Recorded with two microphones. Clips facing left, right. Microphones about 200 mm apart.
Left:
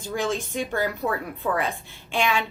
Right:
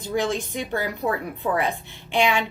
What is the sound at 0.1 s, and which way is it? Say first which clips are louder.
A woman's voice: right 2 dB; 15° right (ahead or behind).